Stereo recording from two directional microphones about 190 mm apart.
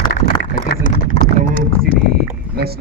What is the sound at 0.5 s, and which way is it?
Clip-clop, 45° left (ahead or behind).